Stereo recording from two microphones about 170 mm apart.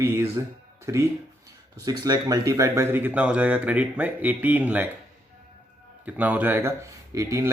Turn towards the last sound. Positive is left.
turn(degrees=-20)  # may be behind; listen again after turning